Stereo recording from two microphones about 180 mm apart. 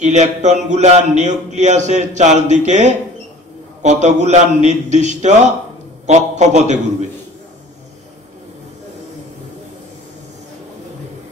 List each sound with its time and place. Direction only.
0.0 s a man's voice: 40° right (ahead or behind)